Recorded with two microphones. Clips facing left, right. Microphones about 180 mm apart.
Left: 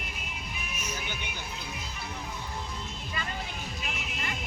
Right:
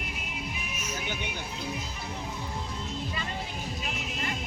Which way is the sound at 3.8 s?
35° right (ahead or behind).